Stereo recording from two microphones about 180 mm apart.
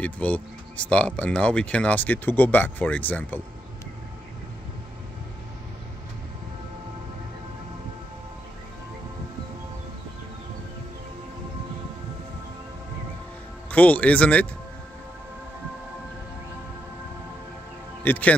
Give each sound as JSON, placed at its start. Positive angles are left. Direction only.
{"t": 0.0, "sound": "speech", "side_deg": 10}
{"t": 13.7, "sound": "speech", "side_deg": 10}
{"t": 18.0, "sound": "speech", "side_deg": 10}